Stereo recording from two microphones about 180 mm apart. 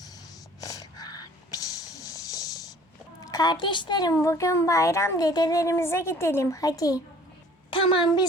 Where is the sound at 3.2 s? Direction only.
20° left (ahead or behind).